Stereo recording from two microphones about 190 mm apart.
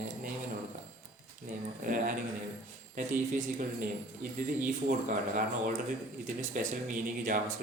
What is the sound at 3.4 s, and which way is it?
Speech, 45° right (ahead or behind).